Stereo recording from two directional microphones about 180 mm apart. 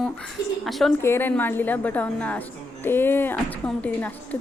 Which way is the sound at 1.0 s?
10° left (ahead or behind).